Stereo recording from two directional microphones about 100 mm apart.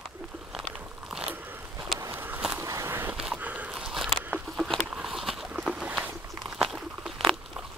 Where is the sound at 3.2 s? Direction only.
10° right (ahead or behind).